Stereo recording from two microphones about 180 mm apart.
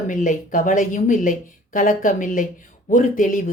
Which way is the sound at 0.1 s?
45° left (ahead or behind).